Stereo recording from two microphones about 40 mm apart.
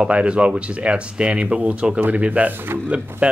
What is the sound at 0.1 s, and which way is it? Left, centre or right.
Speech, right.